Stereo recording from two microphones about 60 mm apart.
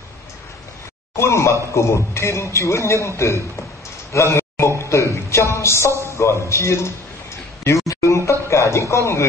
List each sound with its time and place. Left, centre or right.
1.1 s a man's voice: left
4.1 s a sound: left
6.0 s a man's voice: left
7.9 s music: left
8.3 s speech: left